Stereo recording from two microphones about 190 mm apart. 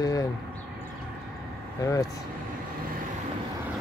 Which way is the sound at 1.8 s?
15° left (ahead or behind).